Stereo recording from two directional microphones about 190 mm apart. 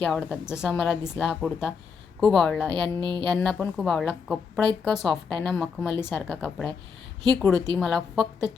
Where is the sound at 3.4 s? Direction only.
5° left (ahead or behind).